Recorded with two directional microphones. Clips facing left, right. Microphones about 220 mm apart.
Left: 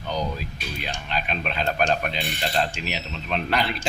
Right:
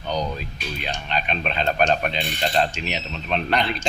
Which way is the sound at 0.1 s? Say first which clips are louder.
Right 2 dB; 5° left (ahead or behind).